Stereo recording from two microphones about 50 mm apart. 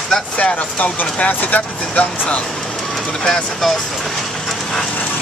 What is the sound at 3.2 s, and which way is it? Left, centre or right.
Speech, centre.